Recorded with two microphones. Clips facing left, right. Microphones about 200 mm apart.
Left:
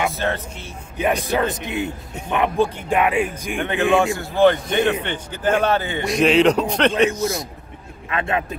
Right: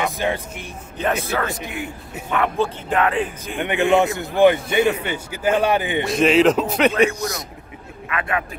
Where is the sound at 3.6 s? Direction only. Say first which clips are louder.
Right 1 dB; 15° right (ahead or behind).